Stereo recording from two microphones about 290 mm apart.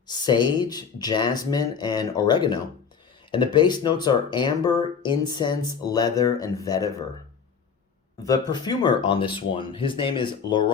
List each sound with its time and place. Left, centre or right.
0.1 s speech: centre
8.2 s speech: centre